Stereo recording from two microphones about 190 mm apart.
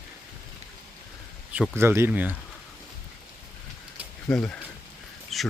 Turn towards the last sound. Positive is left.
turn(degrees=0)  # may be behind; listen again after turning